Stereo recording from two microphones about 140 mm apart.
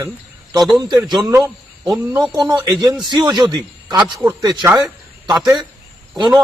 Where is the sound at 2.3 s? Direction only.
30° right (ahead or behind).